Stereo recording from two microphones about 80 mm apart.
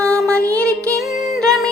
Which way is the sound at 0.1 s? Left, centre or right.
Centre.